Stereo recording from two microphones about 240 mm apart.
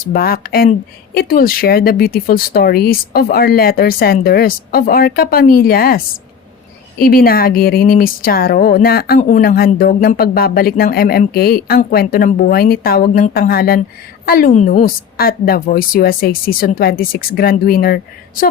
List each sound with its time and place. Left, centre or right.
0.1 s speech: left
7.0 s speech: left